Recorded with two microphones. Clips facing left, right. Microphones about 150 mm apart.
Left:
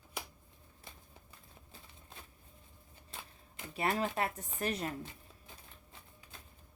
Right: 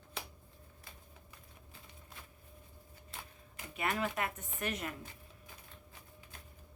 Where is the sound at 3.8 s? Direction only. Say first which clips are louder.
Left 2 dB; 35° left (ahead or behind).